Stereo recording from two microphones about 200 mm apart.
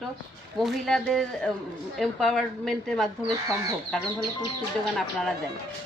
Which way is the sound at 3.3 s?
15° right (ahead or behind).